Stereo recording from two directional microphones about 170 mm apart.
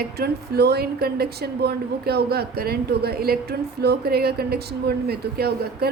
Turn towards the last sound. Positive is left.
turn(degrees=-65)  # may be behind; listen again after turning